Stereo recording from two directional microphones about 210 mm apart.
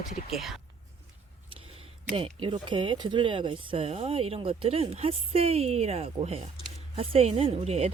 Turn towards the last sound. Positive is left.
turn(degrees=-30)  # may be behind; listen again after turning